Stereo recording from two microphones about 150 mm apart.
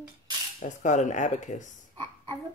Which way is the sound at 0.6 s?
55° left (ahead or behind).